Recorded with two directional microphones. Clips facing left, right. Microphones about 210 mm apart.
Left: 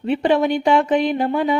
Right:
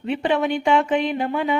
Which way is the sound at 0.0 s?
40° left (ahead or behind).